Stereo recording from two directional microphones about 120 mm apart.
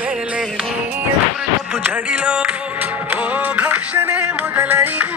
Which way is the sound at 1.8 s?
10° right (ahead or behind).